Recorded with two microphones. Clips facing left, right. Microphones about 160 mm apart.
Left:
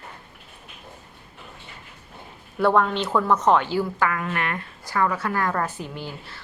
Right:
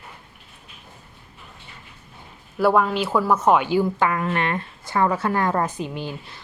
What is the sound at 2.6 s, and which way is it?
A woman's voice, 5° right (ahead or behind).